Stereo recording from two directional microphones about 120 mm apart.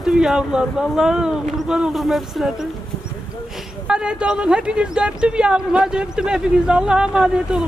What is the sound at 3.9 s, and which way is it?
Speech, 5° right (ahead or behind).